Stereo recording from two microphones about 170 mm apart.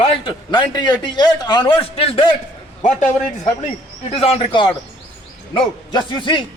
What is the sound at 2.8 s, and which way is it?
Speech, 45° left (ahead or behind).